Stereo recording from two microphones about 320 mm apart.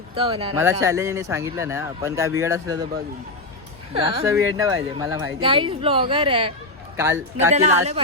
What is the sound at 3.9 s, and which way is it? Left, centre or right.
Speech, centre.